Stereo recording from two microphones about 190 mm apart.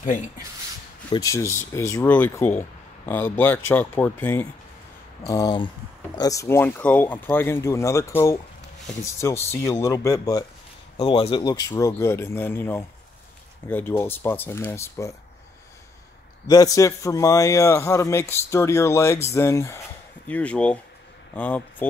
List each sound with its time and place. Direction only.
1.1 s a man's voice: 15° left (ahead or behind)
11.0 s speech: 25° left (ahead or behind)
11.7 s a man's voice: 15° left (ahead or behind)
16.4 s a man's voice: 20° left (ahead or behind)